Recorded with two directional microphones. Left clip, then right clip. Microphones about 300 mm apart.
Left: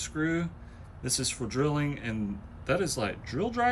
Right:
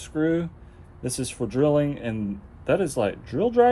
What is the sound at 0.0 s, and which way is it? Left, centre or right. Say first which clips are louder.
Speech: right 6 dB; centre.